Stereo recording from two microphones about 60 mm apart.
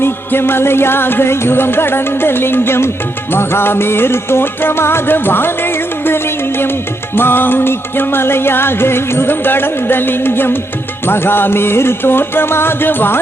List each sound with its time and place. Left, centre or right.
0.0 s music: left